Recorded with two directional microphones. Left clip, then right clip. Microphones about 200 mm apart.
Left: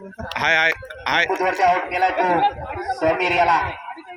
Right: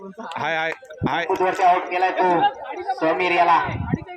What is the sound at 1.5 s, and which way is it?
Speech, 35° left (ahead or behind).